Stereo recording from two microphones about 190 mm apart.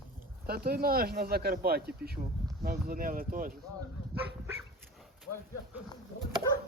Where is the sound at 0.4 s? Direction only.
55° right (ahead or behind).